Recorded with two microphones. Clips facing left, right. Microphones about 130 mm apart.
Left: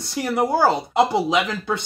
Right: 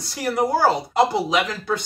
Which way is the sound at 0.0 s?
25° left (ahead or behind).